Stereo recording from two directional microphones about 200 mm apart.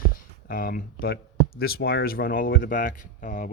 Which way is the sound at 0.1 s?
45° left (ahead or behind).